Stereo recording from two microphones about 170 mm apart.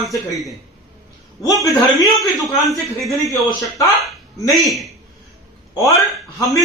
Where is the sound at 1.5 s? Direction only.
Centre (ahead or behind).